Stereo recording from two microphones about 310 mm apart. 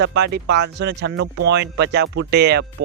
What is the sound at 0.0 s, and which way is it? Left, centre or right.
Speech, right.